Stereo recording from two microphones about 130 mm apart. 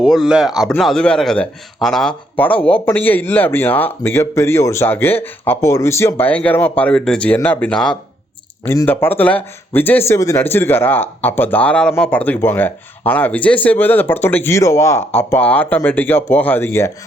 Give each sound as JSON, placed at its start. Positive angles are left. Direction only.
{"t": 0.0, "sound": "speech", "side_deg": -5}
{"t": 8.6, "sound": "speech", "side_deg": 15}